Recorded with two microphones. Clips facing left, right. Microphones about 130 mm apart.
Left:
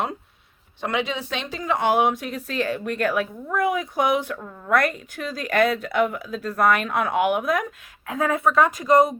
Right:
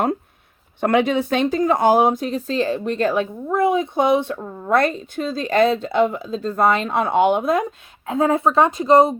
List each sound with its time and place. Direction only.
0.8 s speech: 55° right (ahead or behind); by 9.1 s 30° right (ahead or behind)